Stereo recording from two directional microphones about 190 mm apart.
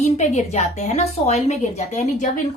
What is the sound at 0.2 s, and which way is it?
A woman's voice, 35° left (ahead or behind).